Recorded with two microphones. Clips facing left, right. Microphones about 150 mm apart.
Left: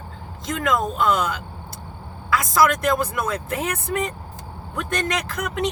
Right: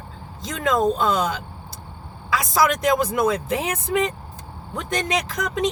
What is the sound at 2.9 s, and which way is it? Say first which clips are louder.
Speech: right 4 dB; 15° right (ahead or behind).